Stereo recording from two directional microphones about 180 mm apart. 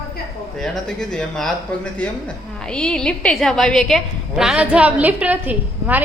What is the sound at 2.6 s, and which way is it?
A woman's voice, 5° left (ahead or behind).